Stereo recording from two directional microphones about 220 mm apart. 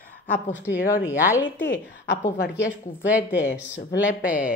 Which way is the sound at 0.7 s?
40° left (ahead or behind).